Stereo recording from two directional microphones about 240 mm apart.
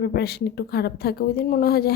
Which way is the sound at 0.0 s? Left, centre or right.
Left.